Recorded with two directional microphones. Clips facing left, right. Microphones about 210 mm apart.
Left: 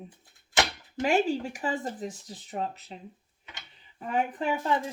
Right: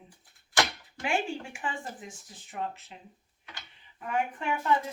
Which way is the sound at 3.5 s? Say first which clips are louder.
Even; 30° left (ahead or behind).